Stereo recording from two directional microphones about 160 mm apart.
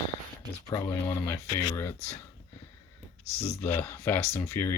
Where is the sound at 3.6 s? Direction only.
15° left (ahead or behind).